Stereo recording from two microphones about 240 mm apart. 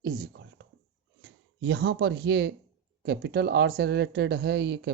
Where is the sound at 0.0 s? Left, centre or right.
Right.